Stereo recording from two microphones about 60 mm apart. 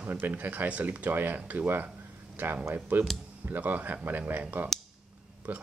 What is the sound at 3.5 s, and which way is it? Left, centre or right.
Speech, right.